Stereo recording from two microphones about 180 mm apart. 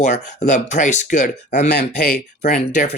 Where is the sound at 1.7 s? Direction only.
60° left (ahead or behind).